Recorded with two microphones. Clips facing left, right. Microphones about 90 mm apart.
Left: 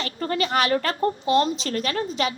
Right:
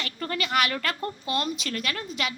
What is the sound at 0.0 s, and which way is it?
A woman's voice, 30° left (ahead or behind).